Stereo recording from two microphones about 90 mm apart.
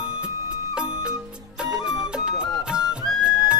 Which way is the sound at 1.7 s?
10° right (ahead or behind).